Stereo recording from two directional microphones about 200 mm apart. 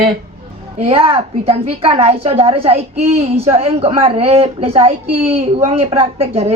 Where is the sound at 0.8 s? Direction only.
30° right (ahead or behind).